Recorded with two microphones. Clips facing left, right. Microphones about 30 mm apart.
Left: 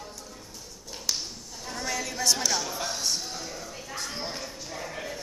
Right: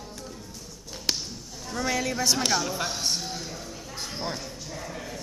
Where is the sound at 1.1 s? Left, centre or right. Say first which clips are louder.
Right 2 dB; right.